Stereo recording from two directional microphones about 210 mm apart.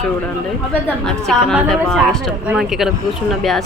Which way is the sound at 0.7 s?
5° left (ahead or behind).